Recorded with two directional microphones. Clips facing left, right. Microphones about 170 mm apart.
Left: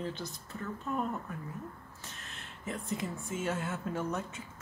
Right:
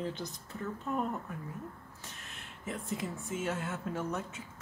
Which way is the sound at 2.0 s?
10° right (ahead or behind).